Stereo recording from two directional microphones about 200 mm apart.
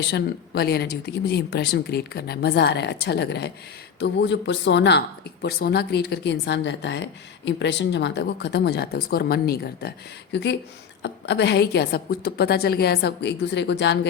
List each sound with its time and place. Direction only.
0.0 s speech: 55° left (ahead or behind)